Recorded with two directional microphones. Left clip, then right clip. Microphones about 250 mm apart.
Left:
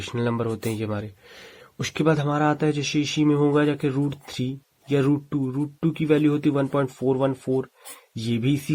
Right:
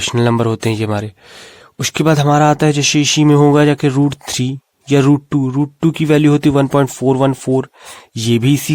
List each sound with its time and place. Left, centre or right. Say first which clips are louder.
0.0 s speech: right 11 dB; right